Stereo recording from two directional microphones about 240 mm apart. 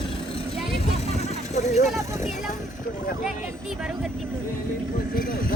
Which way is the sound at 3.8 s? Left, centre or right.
Centre.